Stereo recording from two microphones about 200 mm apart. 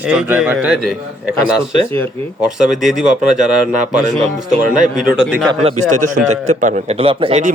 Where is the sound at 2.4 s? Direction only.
Centre (ahead or behind).